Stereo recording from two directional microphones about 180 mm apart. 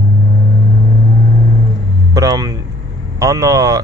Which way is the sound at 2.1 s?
20° right (ahead or behind).